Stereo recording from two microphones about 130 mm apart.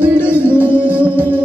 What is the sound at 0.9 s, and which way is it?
Music, 10° right (ahead or behind).